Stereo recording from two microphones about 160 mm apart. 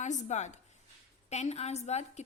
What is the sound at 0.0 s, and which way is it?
A woman's voice, 45° left (ahead or behind).